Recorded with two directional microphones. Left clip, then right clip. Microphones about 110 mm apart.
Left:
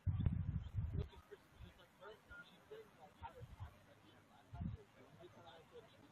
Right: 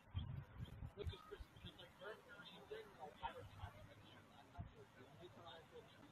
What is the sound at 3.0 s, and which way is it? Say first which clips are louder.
Vehicle: right 5 dB; centre (ahead or behind).